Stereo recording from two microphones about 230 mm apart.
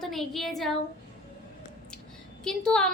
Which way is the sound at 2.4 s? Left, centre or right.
Centre.